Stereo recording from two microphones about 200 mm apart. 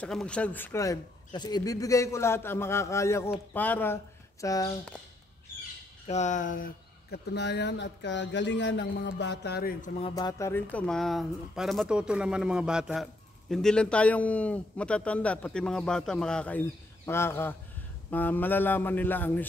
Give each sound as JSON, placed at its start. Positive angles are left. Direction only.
{"t": 0.0, "sound": "a man's voice", "side_deg": 5}
{"t": 6.0, "sound": "speech", "side_deg": 35}
{"t": 10.0, "sound": "a man's voice", "side_deg": 20}